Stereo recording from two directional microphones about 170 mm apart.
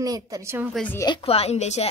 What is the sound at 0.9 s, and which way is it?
Speech, 25° left (ahead or behind).